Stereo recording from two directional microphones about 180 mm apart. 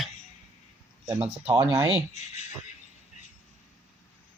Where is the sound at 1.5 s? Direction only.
20° right (ahead or behind).